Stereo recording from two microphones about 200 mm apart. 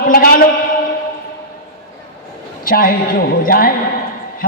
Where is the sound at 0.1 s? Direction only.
45° left (ahead or behind).